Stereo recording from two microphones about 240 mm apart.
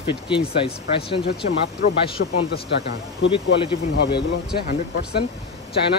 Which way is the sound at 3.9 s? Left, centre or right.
Left.